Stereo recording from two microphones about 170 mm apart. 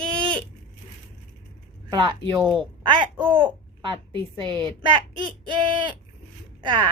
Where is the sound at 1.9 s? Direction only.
25° right (ahead or behind).